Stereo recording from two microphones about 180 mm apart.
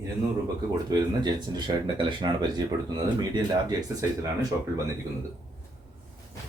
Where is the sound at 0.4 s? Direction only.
25° right (ahead or behind).